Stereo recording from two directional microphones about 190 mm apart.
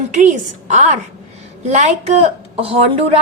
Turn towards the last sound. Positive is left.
turn(degrees=-30)  # may be behind; listen again after turning